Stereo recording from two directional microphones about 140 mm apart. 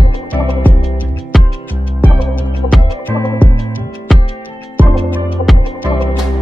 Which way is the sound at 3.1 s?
15° left (ahead or behind).